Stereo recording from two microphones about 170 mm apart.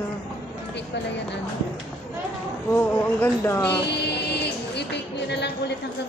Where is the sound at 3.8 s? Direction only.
80° left.